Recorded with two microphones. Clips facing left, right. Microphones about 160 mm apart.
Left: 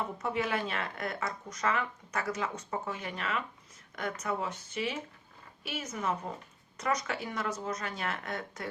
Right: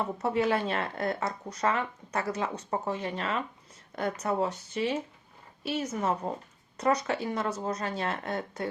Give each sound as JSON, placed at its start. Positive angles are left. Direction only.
{"t": 0.2, "sound": "speech", "side_deg": -35}